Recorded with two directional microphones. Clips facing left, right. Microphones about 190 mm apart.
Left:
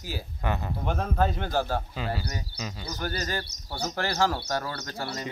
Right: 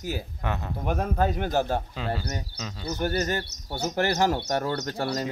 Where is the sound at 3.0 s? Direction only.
20° right (ahead or behind).